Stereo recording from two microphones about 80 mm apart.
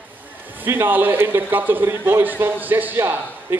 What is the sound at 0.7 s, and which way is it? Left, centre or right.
A man's voice, right.